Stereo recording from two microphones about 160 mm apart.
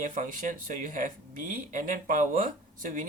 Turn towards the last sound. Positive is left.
turn(degrees=-55)  # may be behind; listen again after turning